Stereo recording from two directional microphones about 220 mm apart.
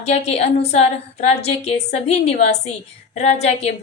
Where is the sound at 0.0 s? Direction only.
30° left (ahead or behind).